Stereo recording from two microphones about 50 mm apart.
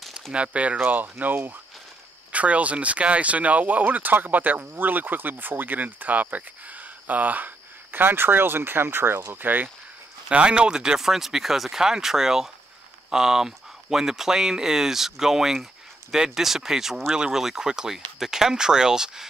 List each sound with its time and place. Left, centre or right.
0.3 s speech: right
0.7 s speech: right
2.3 s speech: right
10.3 s speech: right